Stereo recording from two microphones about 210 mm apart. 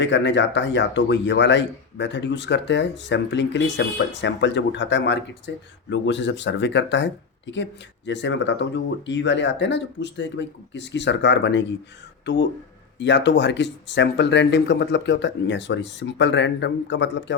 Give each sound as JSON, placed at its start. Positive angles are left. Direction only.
{"t": 0.0, "sound": "speech", "side_deg": 60}